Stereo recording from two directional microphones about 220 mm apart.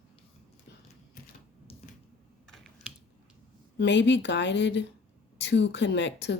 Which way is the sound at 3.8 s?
55° left (ahead or behind).